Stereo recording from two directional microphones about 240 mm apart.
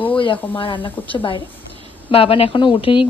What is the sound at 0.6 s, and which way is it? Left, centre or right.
A woman's voice, left.